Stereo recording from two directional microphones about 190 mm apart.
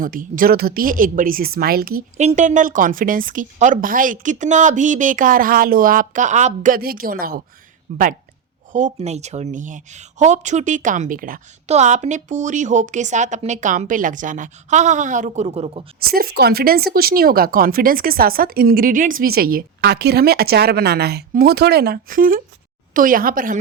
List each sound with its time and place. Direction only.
0.0 s speech: 45° right (ahead or behind)
16.0 s speech: 50° right (ahead or behind)